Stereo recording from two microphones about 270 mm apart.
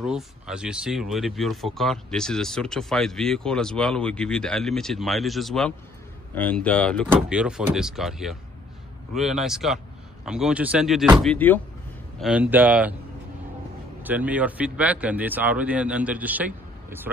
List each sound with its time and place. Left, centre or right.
0.0 s speech: centre
12.2 s speech: centre
14.0 s speech: centre